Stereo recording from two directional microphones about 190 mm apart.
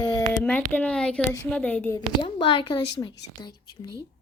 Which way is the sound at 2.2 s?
25° left (ahead or behind).